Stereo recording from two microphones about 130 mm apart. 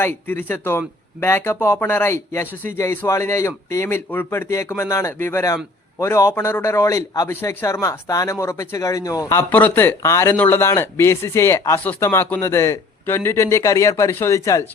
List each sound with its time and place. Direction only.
0.3 s a man's voice: 15° left (ahead or behind)